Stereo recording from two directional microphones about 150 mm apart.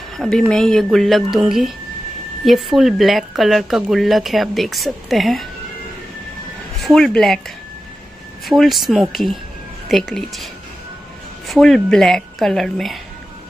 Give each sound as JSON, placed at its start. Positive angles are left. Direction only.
{"t": 0.2, "sound": "speech", "side_deg": 0}
{"t": 6.8, "sound": "speech", "side_deg": 5}